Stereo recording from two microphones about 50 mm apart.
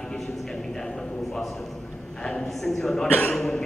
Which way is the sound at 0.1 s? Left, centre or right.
Centre.